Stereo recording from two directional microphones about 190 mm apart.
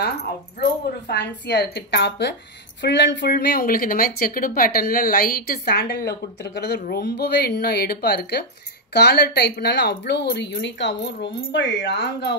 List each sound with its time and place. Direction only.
0.0 s a woman's voice: 55° left (ahead or behind)